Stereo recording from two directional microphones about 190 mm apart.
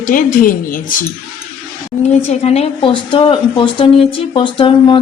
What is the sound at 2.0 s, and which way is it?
A woman's voice, 35° left (ahead or behind).